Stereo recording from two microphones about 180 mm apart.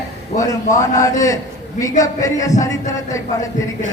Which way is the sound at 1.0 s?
20° left (ahead or behind).